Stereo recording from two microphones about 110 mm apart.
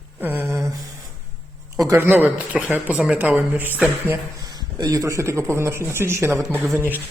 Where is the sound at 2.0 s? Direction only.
15° right (ahead or behind).